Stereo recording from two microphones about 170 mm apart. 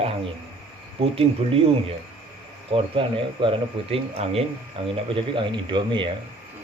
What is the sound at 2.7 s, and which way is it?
Speech, 30° right (ahead or behind).